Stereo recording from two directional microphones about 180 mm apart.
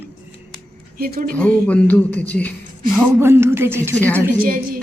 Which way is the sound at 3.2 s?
15° right (ahead or behind).